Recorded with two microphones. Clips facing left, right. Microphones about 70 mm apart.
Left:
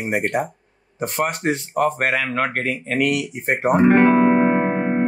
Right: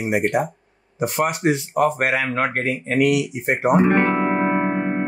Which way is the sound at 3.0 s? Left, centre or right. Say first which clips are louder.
Right 4 dB; left.